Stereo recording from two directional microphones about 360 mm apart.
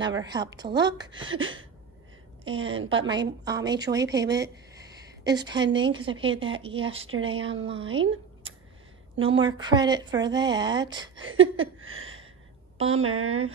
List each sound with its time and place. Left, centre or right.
0.2 s speech: centre
1.2 s a woman's voice: right
3.1 s speech: centre
9.3 s speech: centre
11.1 s a woman's voice: right
11.5 s a sound: right
12.8 s a woman's voice: right